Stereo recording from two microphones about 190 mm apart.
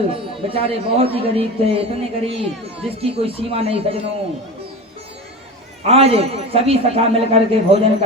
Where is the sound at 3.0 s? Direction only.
30° right (ahead or behind).